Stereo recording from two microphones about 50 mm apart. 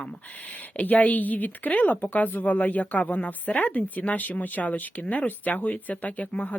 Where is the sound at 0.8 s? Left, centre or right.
Left.